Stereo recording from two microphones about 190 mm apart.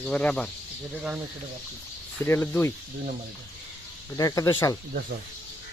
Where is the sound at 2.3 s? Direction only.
10° left (ahead or behind).